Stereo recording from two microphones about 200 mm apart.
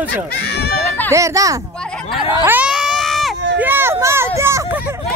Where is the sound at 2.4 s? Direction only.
10° right (ahead or behind).